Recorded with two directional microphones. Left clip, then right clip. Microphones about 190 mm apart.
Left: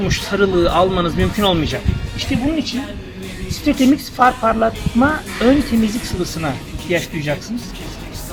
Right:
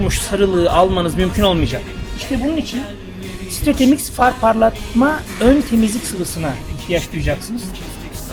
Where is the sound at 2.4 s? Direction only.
Centre (ahead or behind).